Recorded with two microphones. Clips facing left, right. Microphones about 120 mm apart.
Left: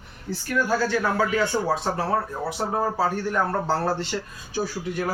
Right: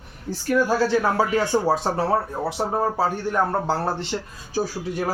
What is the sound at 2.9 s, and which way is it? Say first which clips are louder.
Speech: right 1 dB; 20° right (ahead or behind).